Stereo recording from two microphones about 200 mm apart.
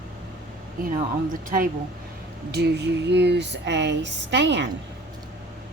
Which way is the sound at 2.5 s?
55° right (ahead or behind).